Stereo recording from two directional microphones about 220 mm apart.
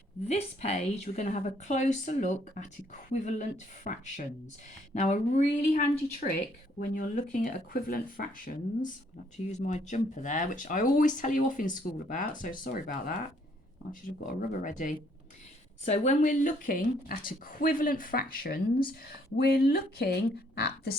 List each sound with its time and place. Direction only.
0.3 s speech: 30° left (ahead or behind)
14.3 s speech: 35° left (ahead or behind)